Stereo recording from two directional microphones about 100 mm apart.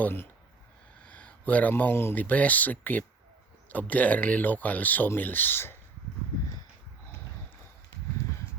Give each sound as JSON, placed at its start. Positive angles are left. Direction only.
{"t": 0.0, "sound": "speech", "side_deg": 20}